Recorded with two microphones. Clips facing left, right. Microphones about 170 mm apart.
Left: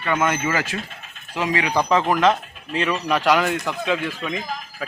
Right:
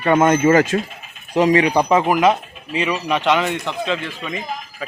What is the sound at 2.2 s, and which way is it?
Speech, 5° right (ahead or behind).